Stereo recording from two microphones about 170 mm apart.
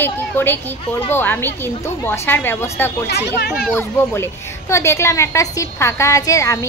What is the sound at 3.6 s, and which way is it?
A woman's voice, 15° left (ahead or behind).